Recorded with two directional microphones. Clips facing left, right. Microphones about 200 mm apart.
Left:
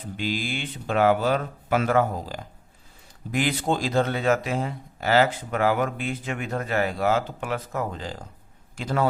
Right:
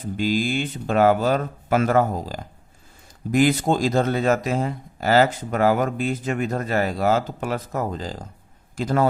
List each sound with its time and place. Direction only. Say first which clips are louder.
0.2 s a man's voice: right 7 dB; 40° right (ahead or behind)